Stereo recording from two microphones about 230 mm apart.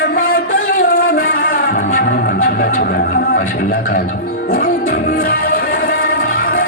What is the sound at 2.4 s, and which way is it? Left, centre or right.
Music, left.